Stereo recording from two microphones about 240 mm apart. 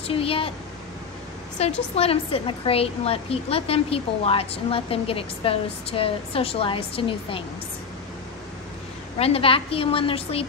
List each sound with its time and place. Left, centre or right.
0.1 s a woman's voice: left
1.6 s a woman's voice: left
9.2 s a woman's voice: left